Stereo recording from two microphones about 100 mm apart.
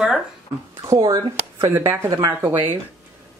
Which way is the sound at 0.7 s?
30° right (ahead or behind).